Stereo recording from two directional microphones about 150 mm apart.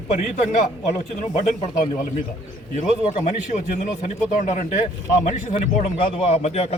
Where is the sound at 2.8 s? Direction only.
50° left (ahead or behind).